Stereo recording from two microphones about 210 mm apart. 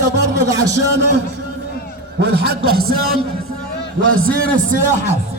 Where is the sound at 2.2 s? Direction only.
50° right (ahead or behind).